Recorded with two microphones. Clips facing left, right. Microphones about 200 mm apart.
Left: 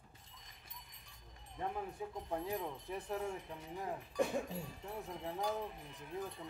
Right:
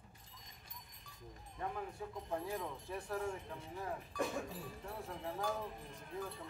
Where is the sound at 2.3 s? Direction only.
20° left (ahead or behind).